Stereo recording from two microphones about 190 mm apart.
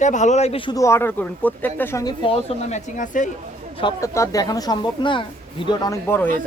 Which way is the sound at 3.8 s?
20° left (ahead or behind).